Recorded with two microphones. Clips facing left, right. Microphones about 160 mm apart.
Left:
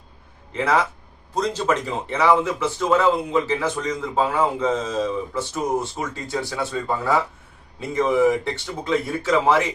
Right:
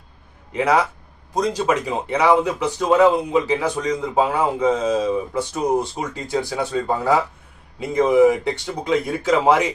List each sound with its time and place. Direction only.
0.5 s speech: 15° right (ahead or behind)